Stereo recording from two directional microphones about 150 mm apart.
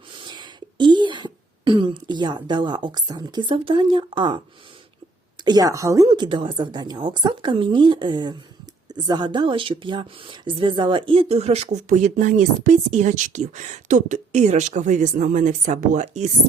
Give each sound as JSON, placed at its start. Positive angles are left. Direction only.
{"t": 0.2, "sound": "speech", "side_deg": -30}
{"t": 5.5, "sound": "a woman's voice", "side_deg": -25}